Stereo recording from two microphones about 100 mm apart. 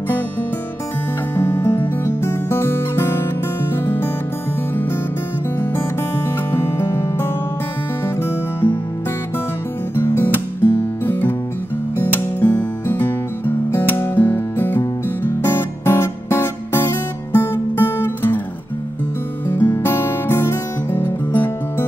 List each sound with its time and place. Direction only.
1.3 s music: 20° left (ahead or behind)
5.8 s music: 25° left (ahead or behind)
9.9 s music: 20° left (ahead or behind)
19.4 s music: 20° left (ahead or behind)